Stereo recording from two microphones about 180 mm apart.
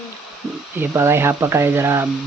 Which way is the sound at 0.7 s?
15° right (ahead or behind).